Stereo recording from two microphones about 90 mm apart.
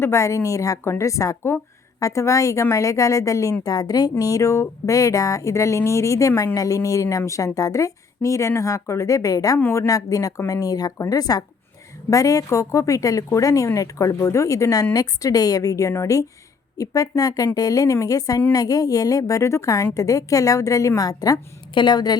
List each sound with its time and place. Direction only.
0.0 s a woman's voice: 35° left (ahead or behind)
21.8 s a woman's voice: 55° left (ahead or behind)